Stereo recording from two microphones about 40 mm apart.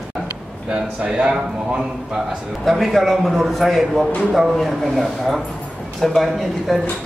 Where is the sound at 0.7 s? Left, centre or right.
Right.